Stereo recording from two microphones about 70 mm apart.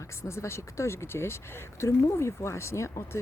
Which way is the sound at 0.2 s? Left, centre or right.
Left.